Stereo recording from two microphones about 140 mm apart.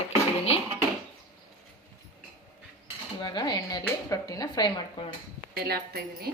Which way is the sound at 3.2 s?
30° left (ahead or behind).